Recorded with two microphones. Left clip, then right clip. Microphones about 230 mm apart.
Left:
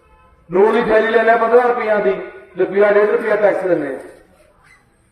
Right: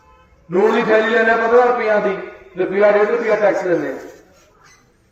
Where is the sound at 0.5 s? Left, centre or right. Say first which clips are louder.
Left 1 dB; centre.